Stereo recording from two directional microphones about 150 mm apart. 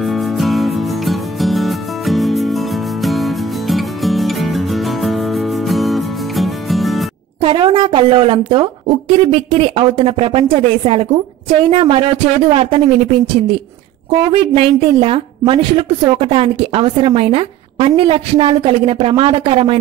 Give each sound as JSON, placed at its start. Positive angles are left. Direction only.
{"t": 0.0, "sound": "music", "side_deg": 0}
{"t": 7.4, "sound": "a woman's voice", "side_deg": -35}
{"t": 14.3, "sound": "a woman's voice", "side_deg": -35}